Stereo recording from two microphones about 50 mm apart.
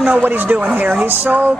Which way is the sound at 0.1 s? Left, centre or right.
Right.